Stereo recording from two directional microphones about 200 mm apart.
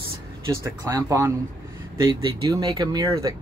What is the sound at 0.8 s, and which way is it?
Speech, 15° right (ahead or behind).